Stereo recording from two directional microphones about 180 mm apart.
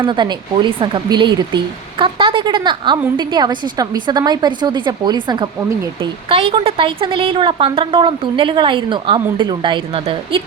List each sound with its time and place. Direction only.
0.0 s speech: 25° right (ahead or behind)